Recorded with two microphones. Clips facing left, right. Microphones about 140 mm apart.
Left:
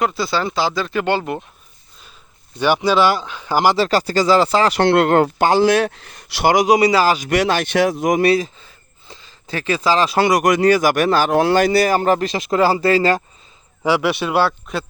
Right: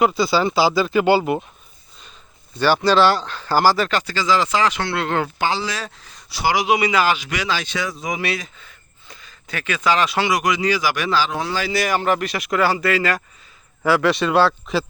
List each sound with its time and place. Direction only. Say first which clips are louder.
0.0 s speech: right 3 dB; centre (ahead or behind)
2.6 s speech: even; 15° left (ahead or behind)
3.8 s speech: left 5 dB; 35° left (ahead or behind)
4.8 s speech: left 9 dB; 55° left (ahead or behind)
6.5 s speech: left 5 dB; 40° left (ahead or behind)
7.3 s speech: left 7 dB; 55° left (ahead or behind)
8.2 s speech: left 10 dB; 35° left (ahead or behind)
10.2 s speech: left 5 dB; 45° left (ahead or behind)
11.7 s speech: left 5 dB; 35° left (ahead or behind)
13.8 s speech: even; 10° left (ahead or behind)